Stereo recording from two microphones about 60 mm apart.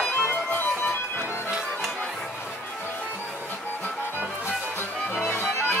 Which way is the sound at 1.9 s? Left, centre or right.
Centre.